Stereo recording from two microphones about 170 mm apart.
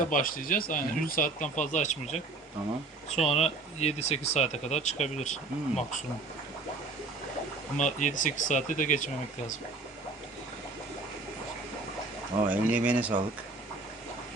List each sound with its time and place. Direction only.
0.0 s speech: 55° left (ahead or behind)
7.8 s speech: 45° left (ahead or behind)
12.5 s speech: 10° right (ahead or behind)